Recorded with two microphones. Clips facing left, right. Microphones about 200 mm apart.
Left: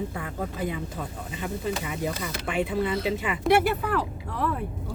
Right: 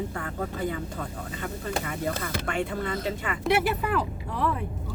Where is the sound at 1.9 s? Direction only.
15° left (ahead or behind).